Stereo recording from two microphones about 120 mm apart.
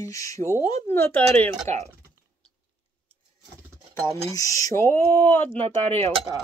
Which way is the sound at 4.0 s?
25° left (ahead or behind).